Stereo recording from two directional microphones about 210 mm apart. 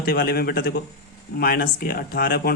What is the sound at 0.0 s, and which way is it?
Speech, 45° left (ahead or behind).